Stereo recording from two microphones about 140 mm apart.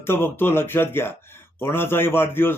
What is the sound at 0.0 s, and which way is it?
Speech, 15° left (ahead or behind).